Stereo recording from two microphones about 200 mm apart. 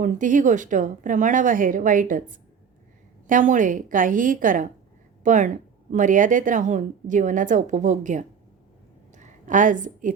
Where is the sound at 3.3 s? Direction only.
40° right (ahead or behind).